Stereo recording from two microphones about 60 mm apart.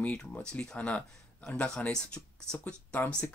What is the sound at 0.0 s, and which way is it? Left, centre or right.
Speech, left.